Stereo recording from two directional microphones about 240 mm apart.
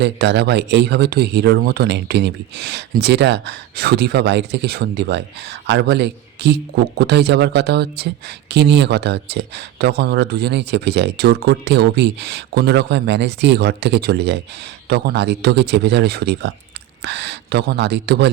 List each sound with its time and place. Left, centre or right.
0.0 s a man's voice: right